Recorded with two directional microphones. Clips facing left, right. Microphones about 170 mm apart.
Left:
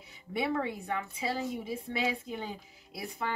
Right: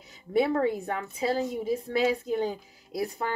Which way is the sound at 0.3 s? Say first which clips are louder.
Right 8 dB; 40° right (ahead or behind).